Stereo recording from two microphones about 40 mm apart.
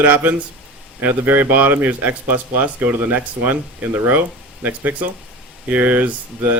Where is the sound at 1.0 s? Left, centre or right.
Right.